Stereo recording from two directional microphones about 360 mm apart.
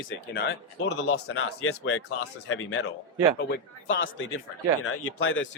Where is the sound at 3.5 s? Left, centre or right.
Left.